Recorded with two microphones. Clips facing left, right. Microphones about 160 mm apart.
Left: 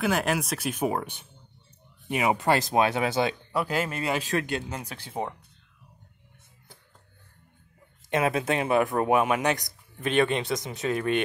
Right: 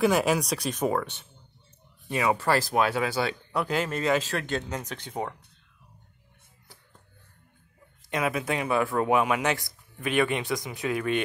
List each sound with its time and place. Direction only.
0.0 s speech: centre (ahead or behind); by 3.3 s 20° left (ahead or behind)
3.5 s speech: 5° left (ahead or behind)
8.1 s speech: 25° left (ahead or behind)